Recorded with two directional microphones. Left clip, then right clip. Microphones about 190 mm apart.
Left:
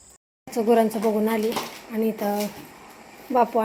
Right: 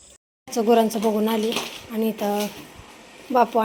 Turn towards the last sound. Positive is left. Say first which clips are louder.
# right 2 dB
turn(degrees=0)  # may be behind; listen again after turning